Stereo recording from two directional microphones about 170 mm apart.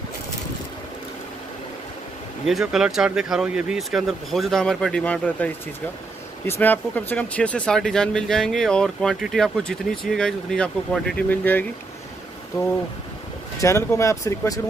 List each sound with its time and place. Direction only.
2.4 s speech: centre (ahead or behind)
13.6 s speech: 15° left (ahead or behind)